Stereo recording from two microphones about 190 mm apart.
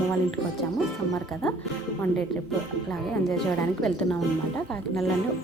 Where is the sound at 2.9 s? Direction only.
Centre (ahead or behind).